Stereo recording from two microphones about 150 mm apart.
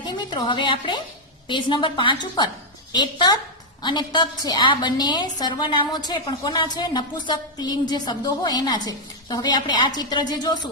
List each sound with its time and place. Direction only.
0.0 s a woman's voice: 30° left (ahead or behind)